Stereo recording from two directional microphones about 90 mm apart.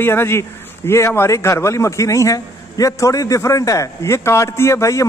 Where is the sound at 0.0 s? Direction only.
25° left (ahead or behind).